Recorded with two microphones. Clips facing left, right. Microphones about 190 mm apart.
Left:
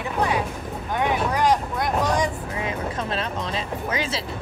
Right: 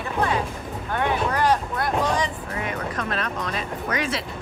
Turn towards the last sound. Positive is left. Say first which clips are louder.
# even
turn(degrees=25)  # may be behind; listen again after turning